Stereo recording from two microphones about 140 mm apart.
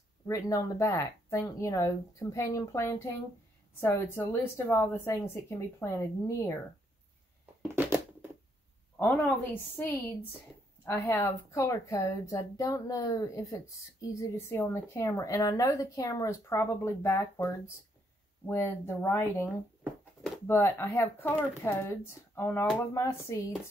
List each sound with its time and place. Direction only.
0.3 s a woman's voice: 20° left (ahead or behind)
7.6 s a sound: 15° right (ahead or behind)
8.9 s a woman's voice: 10° left (ahead or behind)